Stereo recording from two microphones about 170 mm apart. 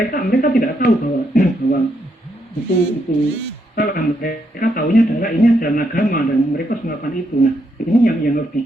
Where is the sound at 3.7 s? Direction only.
60° left (ahead or behind).